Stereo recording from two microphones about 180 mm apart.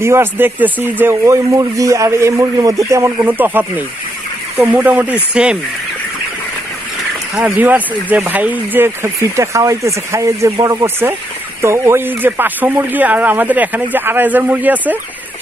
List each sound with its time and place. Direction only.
0.0 s speech: 15° right (ahead or behind)
7.3 s speech: 10° right (ahead or behind)